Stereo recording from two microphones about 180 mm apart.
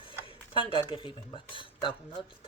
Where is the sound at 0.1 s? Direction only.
30° left (ahead or behind).